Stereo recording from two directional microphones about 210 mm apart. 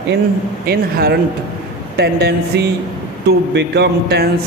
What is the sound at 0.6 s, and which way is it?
A man's voice, 50° right (ahead or behind).